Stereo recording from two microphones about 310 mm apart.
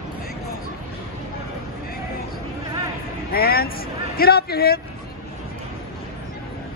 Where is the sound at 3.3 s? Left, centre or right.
Left.